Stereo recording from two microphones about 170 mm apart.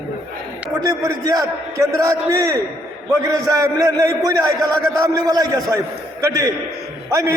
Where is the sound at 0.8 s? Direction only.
20° right (ahead or behind).